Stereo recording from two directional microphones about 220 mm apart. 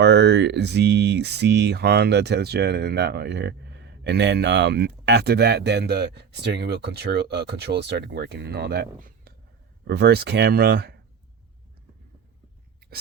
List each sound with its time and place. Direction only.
0.0 s speech: 50° right (ahead or behind)